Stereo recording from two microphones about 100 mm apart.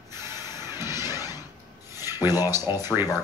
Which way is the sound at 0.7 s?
25° right (ahead or behind).